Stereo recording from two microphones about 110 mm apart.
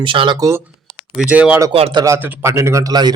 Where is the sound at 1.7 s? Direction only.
60° right (ahead or behind).